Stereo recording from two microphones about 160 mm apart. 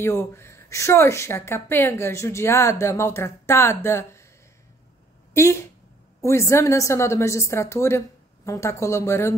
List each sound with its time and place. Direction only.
0.0 s speech: 15° left (ahead or behind)
5.3 s speech: 15° left (ahead or behind)